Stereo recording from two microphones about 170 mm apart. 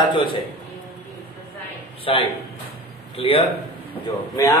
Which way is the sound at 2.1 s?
35° left (ahead or behind).